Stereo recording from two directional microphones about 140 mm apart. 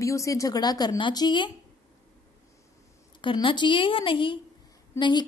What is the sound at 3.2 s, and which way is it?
A woman's voice, 35° left (ahead or behind).